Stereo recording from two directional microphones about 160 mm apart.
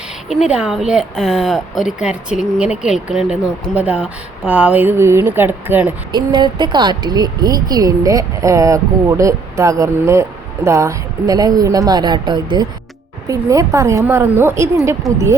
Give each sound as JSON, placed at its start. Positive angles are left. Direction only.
{"t": 0.3, "sound": "speech", "side_deg": -5}
{"t": 6.1, "sound": "speech", "side_deg": -25}
{"t": 15.1, "sound": "speech", "side_deg": 0}